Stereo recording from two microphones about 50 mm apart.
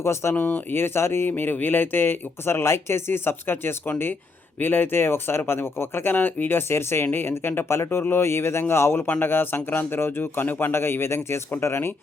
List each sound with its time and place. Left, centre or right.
0.0 s speech: left
0.3 s speech: left
0.7 s speech: left
1.3 s speech: left
3.1 s speech: left
6.1 s speech: left
6.7 s speech: left
9.2 s speech: left